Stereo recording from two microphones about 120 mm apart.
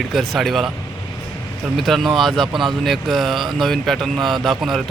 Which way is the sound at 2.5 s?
40° right (ahead or behind).